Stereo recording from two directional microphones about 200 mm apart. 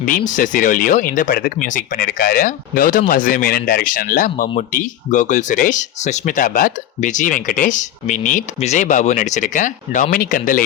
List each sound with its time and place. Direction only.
0.0 s speech: 40° left (ahead or behind)